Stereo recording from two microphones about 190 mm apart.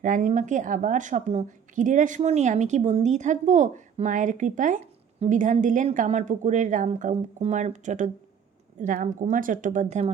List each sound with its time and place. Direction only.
0.0 s a woman's voice: 45° right (ahead or behind)